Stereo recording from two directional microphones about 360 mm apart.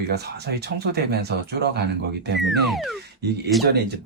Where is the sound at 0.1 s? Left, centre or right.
Right.